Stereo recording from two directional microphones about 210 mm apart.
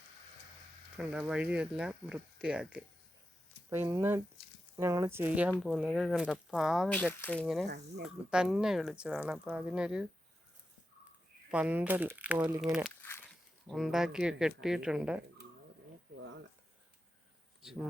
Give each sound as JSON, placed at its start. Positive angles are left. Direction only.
{"t": 0.9, "sound": "speech", "side_deg": -5}
{"t": 11.5, "sound": "speech", "side_deg": -5}
{"t": 13.0, "sound": "a sound", "side_deg": 10}
{"t": 13.7, "sound": "speech", "side_deg": 0}